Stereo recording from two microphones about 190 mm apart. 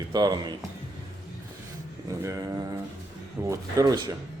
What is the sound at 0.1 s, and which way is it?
Speech, 20° right (ahead or behind).